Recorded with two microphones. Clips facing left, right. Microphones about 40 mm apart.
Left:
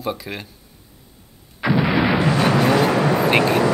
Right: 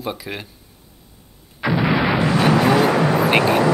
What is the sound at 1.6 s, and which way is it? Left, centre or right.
Artillery fire, centre.